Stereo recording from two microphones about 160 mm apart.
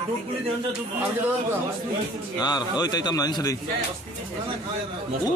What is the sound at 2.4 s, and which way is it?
A man's voice, 25° left (ahead or behind).